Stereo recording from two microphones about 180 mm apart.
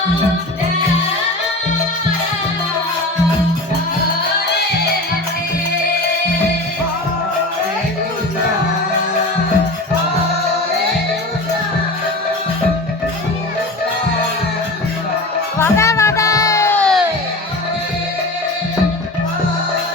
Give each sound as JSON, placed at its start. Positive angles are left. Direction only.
{"t": 15.5, "sound": "music", "side_deg": 15}